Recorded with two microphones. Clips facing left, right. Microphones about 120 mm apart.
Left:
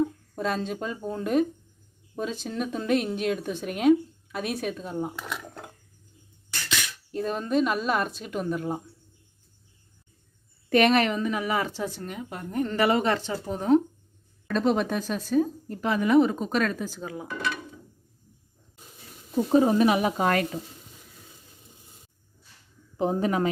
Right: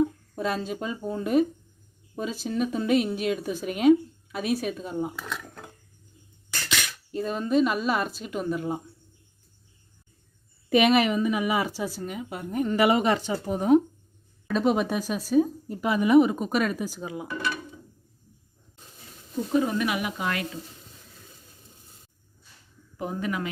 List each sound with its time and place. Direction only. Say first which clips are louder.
0.0 s a woman's voice: right 1 dB; 5° right (ahead or behind)
5.1 s speech: even; 10° left (ahead or behind)
7.1 s a woman's voice: right 1 dB; centre (ahead or behind)
10.7 s speech: even; 5° right (ahead or behind)
19.5 s speech: left 5 dB; 30° left (ahead or behind)
23.0 s speech: left 6 dB; 30° left (ahead or behind)